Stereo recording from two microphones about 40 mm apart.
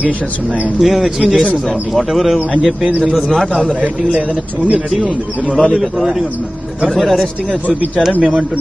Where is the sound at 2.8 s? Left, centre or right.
Right.